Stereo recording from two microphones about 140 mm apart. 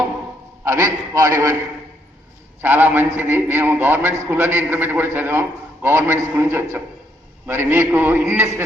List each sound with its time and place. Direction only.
0.6 s a sound: 20° right (ahead or behind)
1.1 s a man's voice: 20° right (ahead or behind)
2.6 s a man's voice: 15° right (ahead or behind)